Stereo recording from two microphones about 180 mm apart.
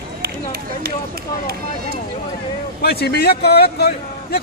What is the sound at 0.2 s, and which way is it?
Run, 60° right (ahead or behind).